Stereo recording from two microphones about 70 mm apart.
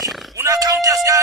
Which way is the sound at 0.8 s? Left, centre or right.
Right.